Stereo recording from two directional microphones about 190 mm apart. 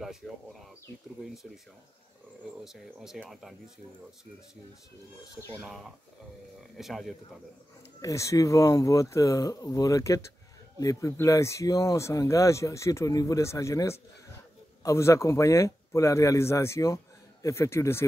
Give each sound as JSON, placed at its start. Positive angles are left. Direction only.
{"t": 0.0, "sound": "speech", "side_deg": 0}
{"t": 2.6, "sound": "speech", "side_deg": 0}
{"t": 5.3, "sound": "speech", "side_deg": 15}
{"t": 5.6, "sound": "speech", "side_deg": -5}
{"t": 8.0, "sound": "speech", "side_deg": 15}